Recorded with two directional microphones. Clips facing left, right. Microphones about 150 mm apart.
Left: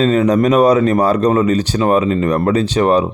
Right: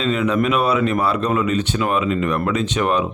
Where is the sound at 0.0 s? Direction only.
40° left (ahead or behind).